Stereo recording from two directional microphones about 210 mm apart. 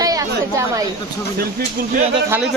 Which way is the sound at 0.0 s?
15° right (ahead or behind).